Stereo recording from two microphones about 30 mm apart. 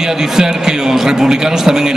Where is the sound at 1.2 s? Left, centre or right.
Centre.